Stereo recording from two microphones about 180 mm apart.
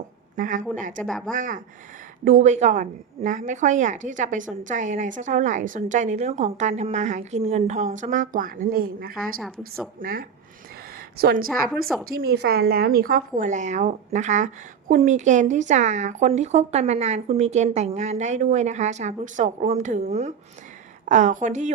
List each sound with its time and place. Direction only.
0.3 s a woman's voice: 45° right (ahead or behind)
1.0 s a woman's voice: centre (ahead or behind)
1.3 s a woman's voice: 45° right (ahead or behind)
9.4 s a woman's voice: centre (ahead or behind)
10.0 s a woman's voice: 50° right (ahead or behind)
10.9 s a sound: 55° right (ahead or behind)
12.0 s a woman's voice: 55° right (ahead or behind)